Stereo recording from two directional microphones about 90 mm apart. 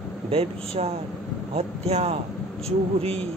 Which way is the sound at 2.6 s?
90° right.